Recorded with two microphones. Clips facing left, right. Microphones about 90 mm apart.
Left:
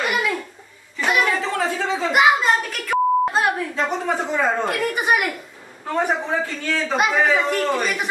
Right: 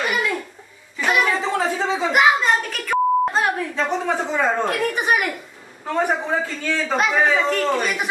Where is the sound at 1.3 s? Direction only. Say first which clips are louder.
Right 1 dB; 20° right (ahead or behind).